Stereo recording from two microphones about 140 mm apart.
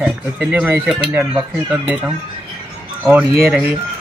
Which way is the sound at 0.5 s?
15° right (ahead or behind).